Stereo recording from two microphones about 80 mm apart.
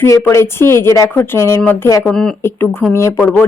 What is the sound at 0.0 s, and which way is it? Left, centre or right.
Speech, left.